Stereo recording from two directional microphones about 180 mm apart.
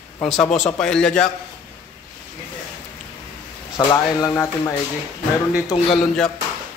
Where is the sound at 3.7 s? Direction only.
20° left (ahead or behind).